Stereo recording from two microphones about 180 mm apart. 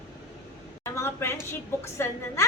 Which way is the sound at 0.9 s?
15° left (ahead or behind).